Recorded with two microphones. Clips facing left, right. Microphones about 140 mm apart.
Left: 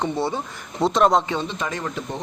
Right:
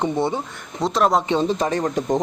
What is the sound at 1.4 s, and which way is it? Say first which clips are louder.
Speech: right 7 dB; 35° right (ahead or behind).